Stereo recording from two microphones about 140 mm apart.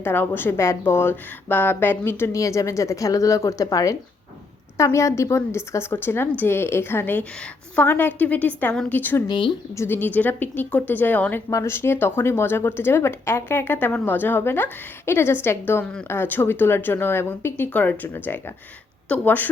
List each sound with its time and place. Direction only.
0.0 s a woman's voice: 15° left (ahead or behind)
9.2 s speech: 35° left (ahead or behind)
9.7 s a woman's voice: 15° left (ahead or behind)